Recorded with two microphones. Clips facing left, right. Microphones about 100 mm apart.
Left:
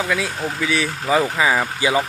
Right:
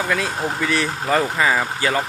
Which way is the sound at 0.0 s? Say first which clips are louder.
Even; centre (ahead or behind).